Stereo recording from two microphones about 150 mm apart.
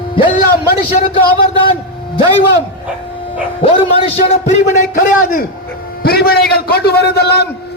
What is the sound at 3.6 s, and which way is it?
A man's voice, 40° left (ahead or behind).